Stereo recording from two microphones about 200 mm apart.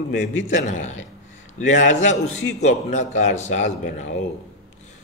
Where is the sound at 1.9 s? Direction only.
35° left (ahead or behind).